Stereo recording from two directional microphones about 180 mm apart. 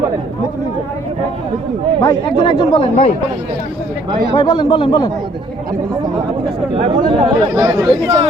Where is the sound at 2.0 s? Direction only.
25° left (ahead or behind).